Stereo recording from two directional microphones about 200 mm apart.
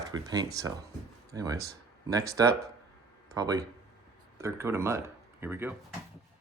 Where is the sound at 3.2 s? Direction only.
20° right (ahead or behind).